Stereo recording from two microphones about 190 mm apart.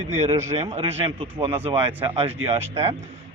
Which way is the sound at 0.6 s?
30° right (ahead or behind).